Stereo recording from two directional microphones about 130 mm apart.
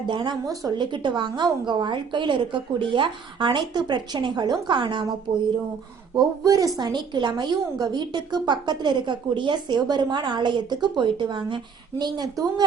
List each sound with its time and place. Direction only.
0.1 s a woman's voice: 35° right (ahead or behind)
6.4 s a woman's voice: 25° right (ahead or behind)